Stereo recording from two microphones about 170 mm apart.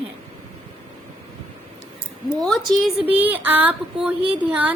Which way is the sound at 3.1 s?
10° right (ahead or behind).